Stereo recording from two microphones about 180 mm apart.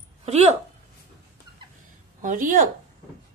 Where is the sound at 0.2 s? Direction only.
35° right (ahead or behind).